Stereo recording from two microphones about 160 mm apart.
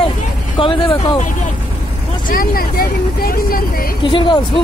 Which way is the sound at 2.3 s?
70° left (ahead or behind).